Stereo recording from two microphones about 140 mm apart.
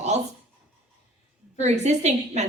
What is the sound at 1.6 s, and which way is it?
Speech, 55° right (ahead or behind).